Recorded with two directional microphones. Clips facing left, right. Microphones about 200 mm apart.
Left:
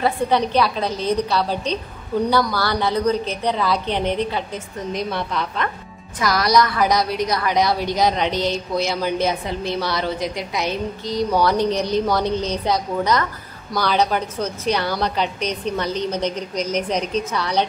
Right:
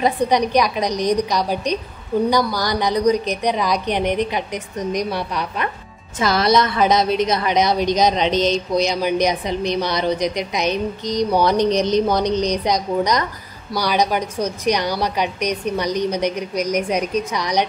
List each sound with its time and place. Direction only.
0.0 s a woman's voice: 15° right (ahead or behind)
6.1 s a woman's voice: 25° right (ahead or behind)